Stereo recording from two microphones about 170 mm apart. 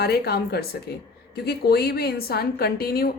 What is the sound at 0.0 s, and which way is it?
Speech, 65° left (ahead or behind).